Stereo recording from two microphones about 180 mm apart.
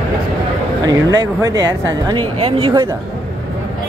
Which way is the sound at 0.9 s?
20° right (ahead or behind).